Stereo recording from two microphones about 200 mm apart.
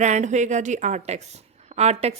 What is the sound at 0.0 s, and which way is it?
A woman's voice, 35° right (ahead or behind).